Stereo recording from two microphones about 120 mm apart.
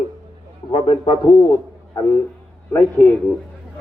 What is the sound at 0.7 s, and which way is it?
Speech, 45° left (ahead or behind).